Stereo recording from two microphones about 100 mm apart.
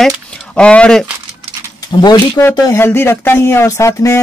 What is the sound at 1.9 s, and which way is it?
Speech, 50° left (ahead or behind).